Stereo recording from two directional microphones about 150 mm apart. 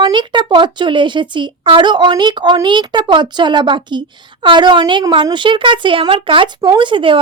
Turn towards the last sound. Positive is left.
turn(degrees=-35)  # may be behind; listen again after turning